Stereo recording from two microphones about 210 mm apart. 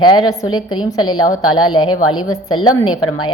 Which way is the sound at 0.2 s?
20° left (ahead or behind).